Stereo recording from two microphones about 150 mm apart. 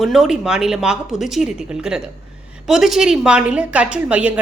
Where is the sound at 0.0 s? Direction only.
Centre (ahead or behind).